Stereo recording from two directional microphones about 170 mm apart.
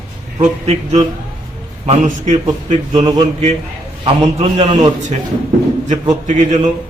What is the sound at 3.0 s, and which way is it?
Speech, 25° right (ahead or behind).